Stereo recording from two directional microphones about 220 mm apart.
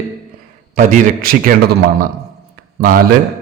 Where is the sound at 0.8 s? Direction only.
35° right (ahead or behind).